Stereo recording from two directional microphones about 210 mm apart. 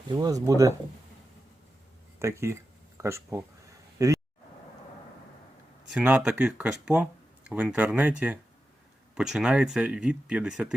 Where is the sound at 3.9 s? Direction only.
15° right (ahead or behind).